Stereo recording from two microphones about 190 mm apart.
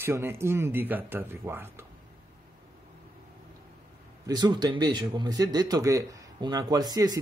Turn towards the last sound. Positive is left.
turn(degrees=-20)  # may be behind; listen again after turning